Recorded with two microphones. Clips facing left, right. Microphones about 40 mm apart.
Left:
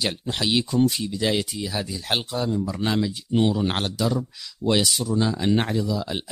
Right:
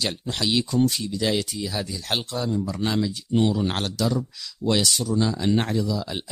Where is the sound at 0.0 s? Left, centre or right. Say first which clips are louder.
Left 1 dB; centre.